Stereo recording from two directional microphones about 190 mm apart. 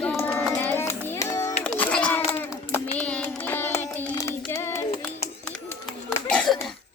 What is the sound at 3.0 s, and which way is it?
Child singing, 5° left (ahead or behind).